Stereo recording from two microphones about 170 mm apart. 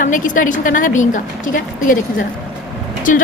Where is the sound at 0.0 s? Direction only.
50° left (ahead or behind).